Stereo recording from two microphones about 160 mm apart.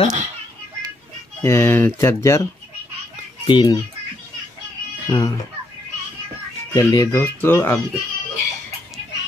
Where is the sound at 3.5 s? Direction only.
30° left (ahead or behind).